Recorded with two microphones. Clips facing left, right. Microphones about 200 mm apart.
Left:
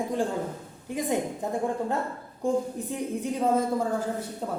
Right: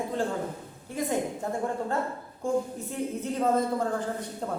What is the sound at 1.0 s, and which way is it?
A woman's voice, 15° left (ahead or behind).